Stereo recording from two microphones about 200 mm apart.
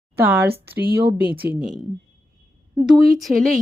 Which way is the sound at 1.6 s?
Centre (ahead or behind).